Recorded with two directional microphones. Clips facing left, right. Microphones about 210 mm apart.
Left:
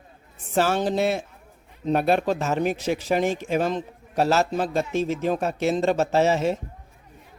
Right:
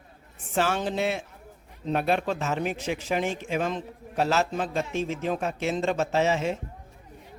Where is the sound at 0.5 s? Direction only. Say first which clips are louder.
Left 4 dB; 40° left (ahead or behind).